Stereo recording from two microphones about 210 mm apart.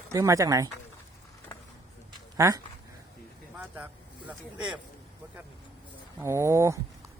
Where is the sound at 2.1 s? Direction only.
15° right (ahead or behind).